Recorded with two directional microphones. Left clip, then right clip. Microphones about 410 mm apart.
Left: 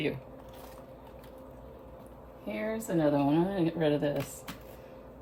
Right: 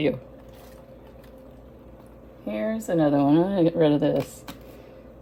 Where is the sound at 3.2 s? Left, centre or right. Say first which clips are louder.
Right 8 dB; centre.